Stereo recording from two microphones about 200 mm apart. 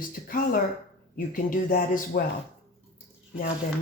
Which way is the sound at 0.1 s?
45° left (ahead or behind).